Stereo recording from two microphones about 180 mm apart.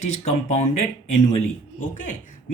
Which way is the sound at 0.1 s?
40° left (ahead or behind).